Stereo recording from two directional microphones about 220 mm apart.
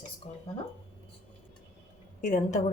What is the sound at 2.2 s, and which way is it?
Speech, 35° left (ahead or behind).